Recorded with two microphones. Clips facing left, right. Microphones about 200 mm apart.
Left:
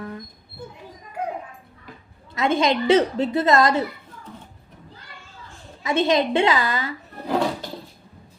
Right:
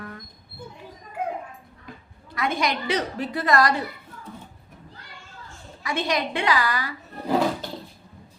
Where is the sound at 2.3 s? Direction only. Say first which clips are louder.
Left 6 dB; 25° left (ahead or behind).